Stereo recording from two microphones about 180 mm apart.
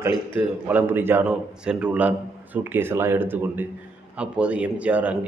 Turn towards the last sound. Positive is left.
turn(degrees=-5)  # may be behind; listen again after turning